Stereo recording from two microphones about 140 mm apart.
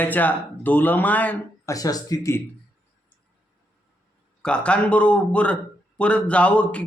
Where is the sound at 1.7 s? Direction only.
25° left (ahead or behind).